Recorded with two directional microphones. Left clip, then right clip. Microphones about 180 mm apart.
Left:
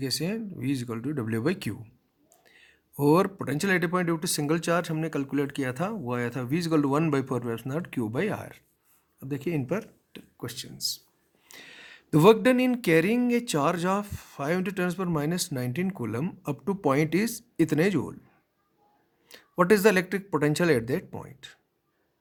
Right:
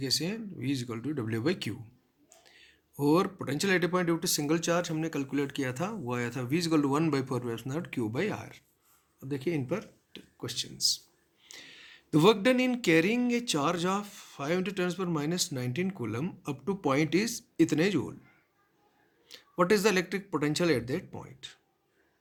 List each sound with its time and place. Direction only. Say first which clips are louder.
0.0 s speech: left 1 dB; 40° left (ahead or behind)
19.3 s speech: left 4 dB; 40° left (ahead or behind)